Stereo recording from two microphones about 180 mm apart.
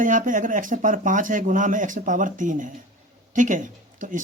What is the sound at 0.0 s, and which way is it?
Speech, 45° right (ahead or behind).